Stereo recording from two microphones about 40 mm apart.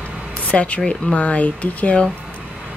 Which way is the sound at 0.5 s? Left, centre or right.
Left.